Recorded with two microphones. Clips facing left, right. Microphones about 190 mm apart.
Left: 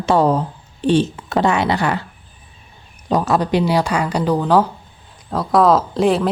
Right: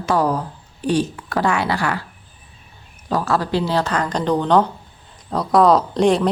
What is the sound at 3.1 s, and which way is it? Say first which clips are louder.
A woman's voice: left 3 dB; 20° left (ahead or behind).